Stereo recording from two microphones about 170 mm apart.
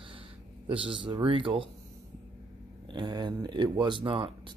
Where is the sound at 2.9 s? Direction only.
25° right (ahead or behind).